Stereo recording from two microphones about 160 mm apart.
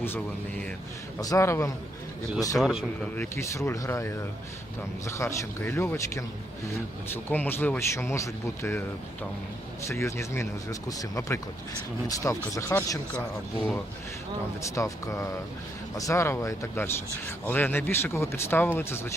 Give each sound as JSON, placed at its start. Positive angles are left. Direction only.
{"t": 1.2, "sound": "speech", "side_deg": 20}
{"t": 2.6, "sound": "speech", "side_deg": 0}
{"t": 3.2, "sound": "speech", "side_deg": 15}
{"t": 9.9, "sound": "speech", "side_deg": 15}
{"t": 14.8, "sound": "speech", "side_deg": 20}